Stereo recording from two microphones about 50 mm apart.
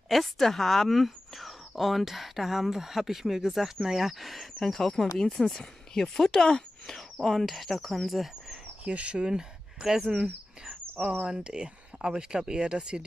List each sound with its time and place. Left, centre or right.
0.1 s speech: centre
8.8 s speech: right